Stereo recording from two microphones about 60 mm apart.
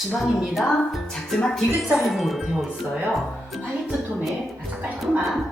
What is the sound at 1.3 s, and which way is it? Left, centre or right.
Speech, centre.